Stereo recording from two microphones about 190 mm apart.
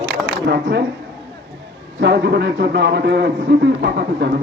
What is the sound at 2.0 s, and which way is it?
Speech, 60° right (ahead or behind).